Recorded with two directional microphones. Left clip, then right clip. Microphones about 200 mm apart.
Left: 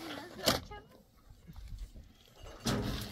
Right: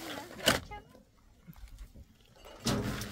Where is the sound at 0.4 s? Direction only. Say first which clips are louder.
Right 3 dB; 35° right (ahead or behind).